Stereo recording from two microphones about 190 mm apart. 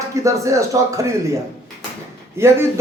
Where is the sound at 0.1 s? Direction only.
15° right (ahead or behind).